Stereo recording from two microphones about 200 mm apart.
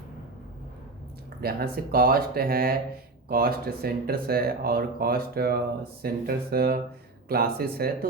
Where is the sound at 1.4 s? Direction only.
50° right (ahead or behind).